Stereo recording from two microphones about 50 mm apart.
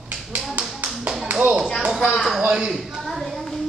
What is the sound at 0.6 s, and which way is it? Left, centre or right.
Tap, right.